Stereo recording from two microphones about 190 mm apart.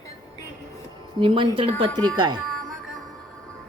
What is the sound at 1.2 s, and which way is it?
Speech, 30° right (ahead or behind).